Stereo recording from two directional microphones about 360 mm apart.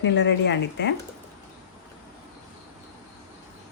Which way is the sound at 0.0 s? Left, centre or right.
Left.